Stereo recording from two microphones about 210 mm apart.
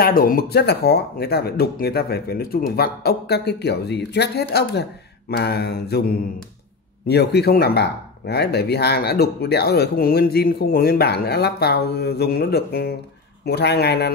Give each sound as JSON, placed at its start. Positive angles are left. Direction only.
{"t": 0.0, "sound": "speech", "side_deg": 45}